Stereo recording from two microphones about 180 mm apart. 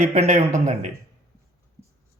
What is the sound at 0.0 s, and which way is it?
Speech, 40° right (ahead or behind).